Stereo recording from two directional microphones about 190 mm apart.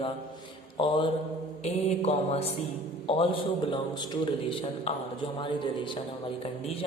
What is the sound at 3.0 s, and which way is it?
A man's voice, 30° left (ahead or behind).